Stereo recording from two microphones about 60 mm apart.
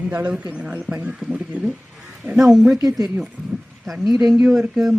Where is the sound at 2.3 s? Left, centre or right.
Centre.